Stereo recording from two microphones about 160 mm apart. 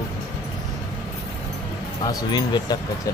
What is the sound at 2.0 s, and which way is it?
Speech, 25° left (ahead or behind).